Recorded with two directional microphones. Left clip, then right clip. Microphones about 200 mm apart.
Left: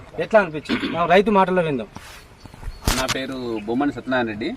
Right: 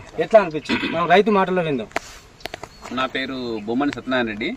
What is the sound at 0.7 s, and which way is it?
Speech, 20° right (ahead or behind).